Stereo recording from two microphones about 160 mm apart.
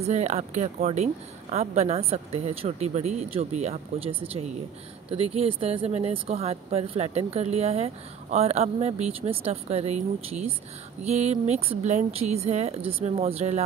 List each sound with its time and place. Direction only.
0.0 s speech: 45° right (ahead or behind)